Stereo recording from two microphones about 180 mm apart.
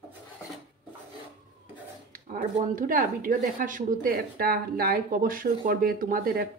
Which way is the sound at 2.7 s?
50° right (ahead or behind).